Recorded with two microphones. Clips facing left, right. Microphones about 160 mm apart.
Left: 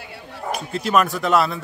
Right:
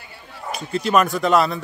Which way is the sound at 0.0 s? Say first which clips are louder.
Left 5 dB; 70° left (ahead or behind).